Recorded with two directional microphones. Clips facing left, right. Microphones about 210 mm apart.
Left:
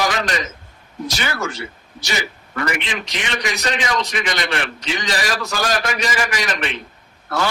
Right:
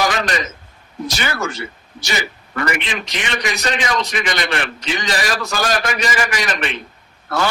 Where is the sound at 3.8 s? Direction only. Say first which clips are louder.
Right 1 dB; 55° right (ahead or behind).